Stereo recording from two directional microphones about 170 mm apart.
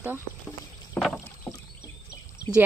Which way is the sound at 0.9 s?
Centre (ahead or behind).